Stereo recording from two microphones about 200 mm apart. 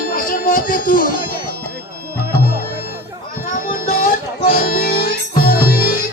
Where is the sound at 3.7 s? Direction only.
45° left (ahead or behind).